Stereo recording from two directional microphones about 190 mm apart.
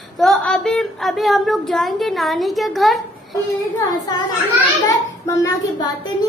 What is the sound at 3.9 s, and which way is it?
A woman's voice, 20° left (ahead or behind).